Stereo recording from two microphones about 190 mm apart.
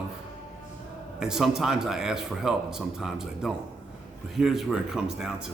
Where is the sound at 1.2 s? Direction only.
Centre (ahead or behind).